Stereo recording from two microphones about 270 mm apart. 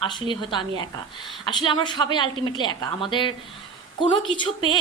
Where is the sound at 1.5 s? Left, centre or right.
Centre.